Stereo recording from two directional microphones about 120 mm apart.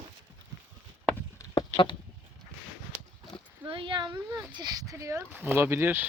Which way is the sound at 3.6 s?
45° right (ahead or behind).